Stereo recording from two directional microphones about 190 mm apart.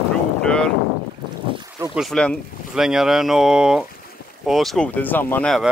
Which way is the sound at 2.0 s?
Centre (ahead or behind).